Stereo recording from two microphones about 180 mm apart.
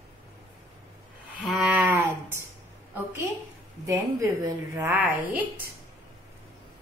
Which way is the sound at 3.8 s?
15° right (ahead or behind).